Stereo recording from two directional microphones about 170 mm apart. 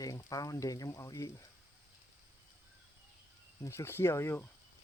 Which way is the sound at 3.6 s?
15° left (ahead or behind).